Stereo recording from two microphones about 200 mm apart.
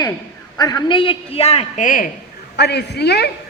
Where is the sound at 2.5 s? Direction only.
55° left (ahead or behind).